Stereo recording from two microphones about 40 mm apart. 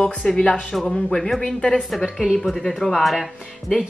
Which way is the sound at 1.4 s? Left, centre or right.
Left.